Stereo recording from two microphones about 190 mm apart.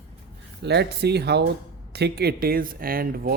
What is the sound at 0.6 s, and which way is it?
Speech, 60° right (ahead or behind).